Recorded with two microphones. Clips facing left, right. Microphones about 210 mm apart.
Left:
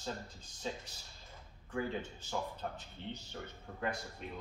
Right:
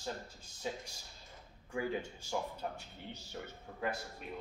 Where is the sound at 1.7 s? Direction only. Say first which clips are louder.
Right 1 dB; 10° right (ahead or behind).